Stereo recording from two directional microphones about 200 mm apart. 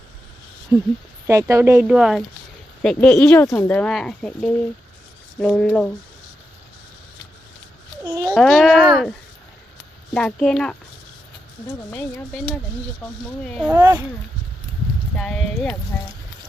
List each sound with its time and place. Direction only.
1.3 s speech: 15° right (ahead or behind); by 5.9 s 5° left (ahead or behind)
8.0 s a child's voice: 20° right (ahead or behind)
8.3 s speech: centre (ahead or behind)
10.2 s speech: 5° left (ahead or behind)
11.9 s speech: 10° left (ahead or behind)
13.7 s speech: 10° right (ahead or behind)
15.1 s speech: 5° left (ahead or behind)